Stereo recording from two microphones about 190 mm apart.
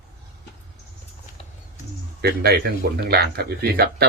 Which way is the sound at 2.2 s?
55° right (ahead or behind).